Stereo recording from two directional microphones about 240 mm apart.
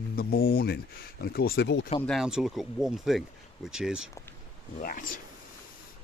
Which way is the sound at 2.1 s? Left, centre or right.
Centre.